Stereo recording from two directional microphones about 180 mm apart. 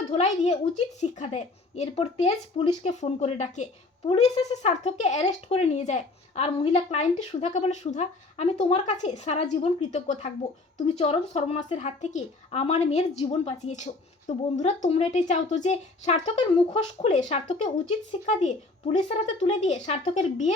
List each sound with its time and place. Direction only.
0.1 s speech: 35° left (ahead or behind)